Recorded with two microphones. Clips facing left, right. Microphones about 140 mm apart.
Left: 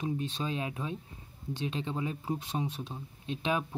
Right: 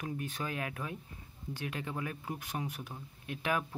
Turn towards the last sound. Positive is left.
turn(degrees=20)  # may be behind; listen again after turning